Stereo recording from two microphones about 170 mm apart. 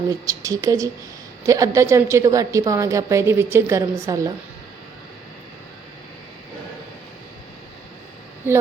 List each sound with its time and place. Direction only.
0.1 s a woman's voice: 20° right (ahead or behind)